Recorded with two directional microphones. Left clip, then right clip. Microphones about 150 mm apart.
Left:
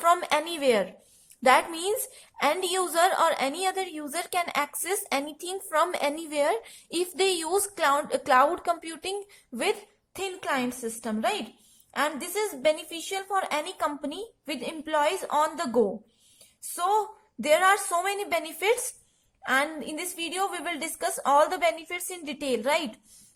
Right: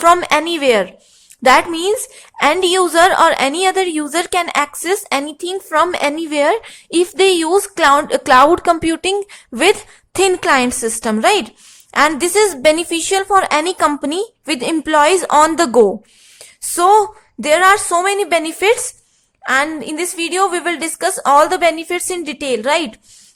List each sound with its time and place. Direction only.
0.0 s a woman's voice: 20° right (ahead or behind); by 17.1 s 35° right (ahead or behind)
17.4 s a woman's voice: 25° right (ahead or behind)